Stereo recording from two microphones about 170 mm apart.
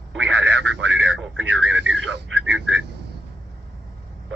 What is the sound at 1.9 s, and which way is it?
Speech, 90° right.